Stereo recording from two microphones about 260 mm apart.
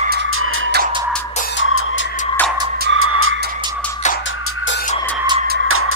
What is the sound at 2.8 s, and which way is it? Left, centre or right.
Vehicle, right.